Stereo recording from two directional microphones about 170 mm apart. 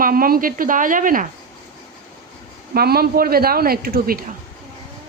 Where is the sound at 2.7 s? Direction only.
65° right (ahead or behind).